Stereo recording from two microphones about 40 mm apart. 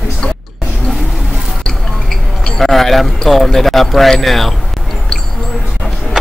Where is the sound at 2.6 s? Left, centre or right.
Centre.